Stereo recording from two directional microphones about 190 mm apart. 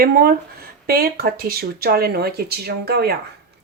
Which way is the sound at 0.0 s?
50° right (ahead or behind).